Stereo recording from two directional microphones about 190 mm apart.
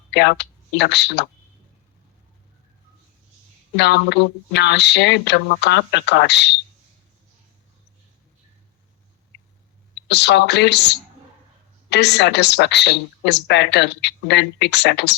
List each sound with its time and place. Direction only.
0.1 s speech: 65° left (ahead or behind)
3.8 s a woman's voice: 65° left (ahead or behind)
10.1 s a woman's voice: 65° left (ahead or behind)